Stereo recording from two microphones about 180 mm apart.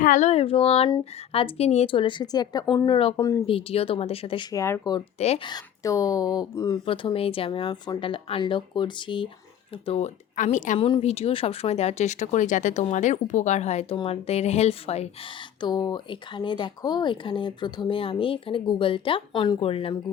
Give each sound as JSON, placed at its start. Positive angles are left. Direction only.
{"t": 0.0, "sound": "speech", "side_deg": 45}
{"t": 4.5, "sound": "speech", "side_deg": 15}
{"t": 6.8, "sound": "speech", "side_deg": 30}
{"t": 10.3, "sound": "a woman's voice", "side_deg": 45}
{"t": 10.8, "sound": "speech", "side_deg": 30}
{"t": 15.6, "sound": "speech", "side_deg": 20}